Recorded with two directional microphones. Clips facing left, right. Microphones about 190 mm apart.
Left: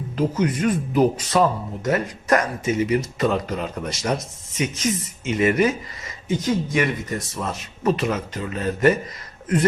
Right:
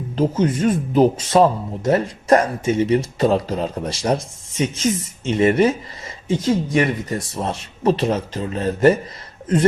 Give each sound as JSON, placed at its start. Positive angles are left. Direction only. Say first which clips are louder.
{"t": 0.2, "sound": "speech", "louder": "right 3 dB", "side_deg": -30}